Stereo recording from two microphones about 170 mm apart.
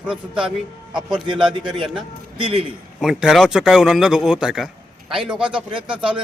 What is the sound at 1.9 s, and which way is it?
Speech, 30° right (ahead or behind).